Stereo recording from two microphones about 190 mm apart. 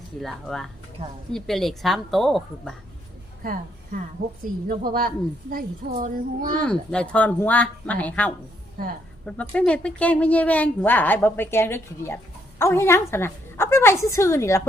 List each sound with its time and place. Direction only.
0.2 s a woman's voice: centre (ahead or behind)
3.4 s a woman's voice: 50° right (ahead or behind)
6.7 s a woman's voice: 5° left (ahead or behind)
8.8 s a child's voice: 50° right (ahead or behind)
9.2 s a woman's voice: 5° left (ahead or behind)